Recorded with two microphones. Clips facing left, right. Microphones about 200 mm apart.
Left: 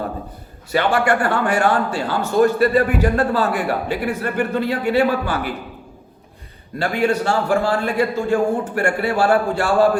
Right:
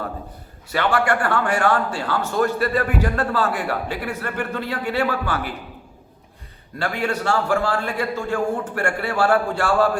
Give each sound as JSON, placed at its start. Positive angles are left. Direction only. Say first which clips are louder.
{"t": 0.7, "sound": "a man's voice", "louder": "left 3 dB", "side_deg": 15}
{"t": 6.7, "sound": "a man's voice", "louder": "left 5 dB", "side_deg": 15}